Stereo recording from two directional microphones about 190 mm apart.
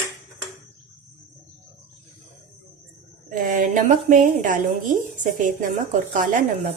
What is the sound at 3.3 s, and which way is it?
A woman's voice, 45° right (ahead or behind).